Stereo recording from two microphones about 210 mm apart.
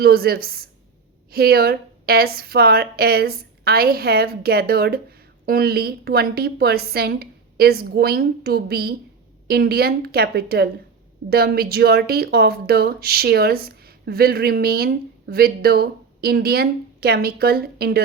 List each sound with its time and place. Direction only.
0.0 s speech: 45° right (ahead or behind)